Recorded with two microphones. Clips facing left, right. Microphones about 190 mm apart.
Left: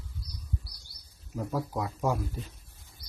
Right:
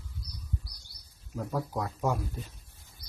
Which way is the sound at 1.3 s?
5° left (ahead or behind).